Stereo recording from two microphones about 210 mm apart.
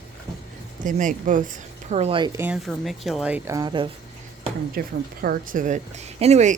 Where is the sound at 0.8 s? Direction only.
40° right (ahead or behind); by 2.4 s 20° right (ahead or behind).